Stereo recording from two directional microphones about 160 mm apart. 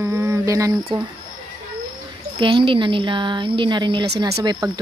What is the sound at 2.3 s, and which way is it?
A woman's voice, 30° right (ahead or behind).